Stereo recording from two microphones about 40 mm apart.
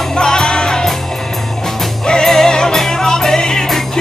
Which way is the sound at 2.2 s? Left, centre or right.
Centre.